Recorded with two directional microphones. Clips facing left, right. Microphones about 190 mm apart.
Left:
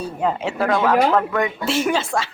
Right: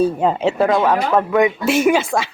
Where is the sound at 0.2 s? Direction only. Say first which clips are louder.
Right 5 dB; 25° right (ahead or behind).